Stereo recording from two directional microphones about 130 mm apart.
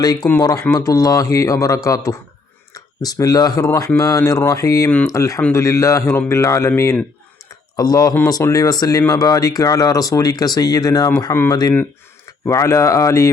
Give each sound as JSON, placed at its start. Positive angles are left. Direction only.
{"t": 0.0, "sound": "speech", "side_deg": 30}